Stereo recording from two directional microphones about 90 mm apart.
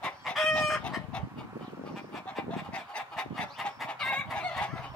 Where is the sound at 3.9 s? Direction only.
10° left (ahead or behind).